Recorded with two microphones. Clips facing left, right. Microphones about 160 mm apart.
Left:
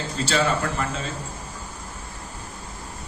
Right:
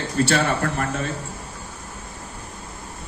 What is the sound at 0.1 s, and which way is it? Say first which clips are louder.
Speech: right 3 dB; 60° right (ahead or behind).